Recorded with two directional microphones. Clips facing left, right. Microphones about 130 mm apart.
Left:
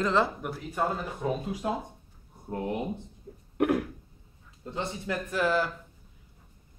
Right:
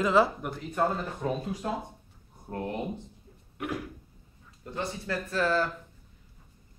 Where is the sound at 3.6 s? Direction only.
55° left (ahead or behind).